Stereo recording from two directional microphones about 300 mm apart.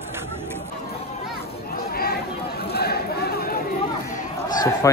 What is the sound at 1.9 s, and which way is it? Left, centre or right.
Chatter, left.